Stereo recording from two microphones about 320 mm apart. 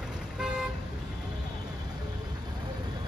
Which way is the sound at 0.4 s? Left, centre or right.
Centre.